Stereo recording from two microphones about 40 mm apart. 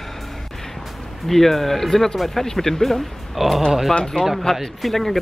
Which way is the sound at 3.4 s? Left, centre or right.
Centre.